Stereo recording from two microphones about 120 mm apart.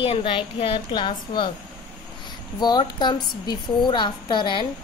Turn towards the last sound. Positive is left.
turn(degrees=40)  # may be behind; listen again after turning